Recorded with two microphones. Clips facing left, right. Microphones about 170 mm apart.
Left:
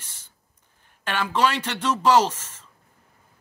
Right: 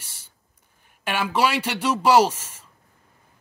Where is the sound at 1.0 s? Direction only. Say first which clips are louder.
Even; 10° right (ahead or behind).